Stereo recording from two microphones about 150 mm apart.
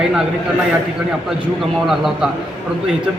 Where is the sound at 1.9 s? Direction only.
Centre (ahead or behind).